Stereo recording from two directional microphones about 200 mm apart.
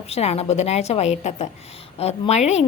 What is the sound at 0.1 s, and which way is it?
A woman's voice, 30° left (ahead or behind).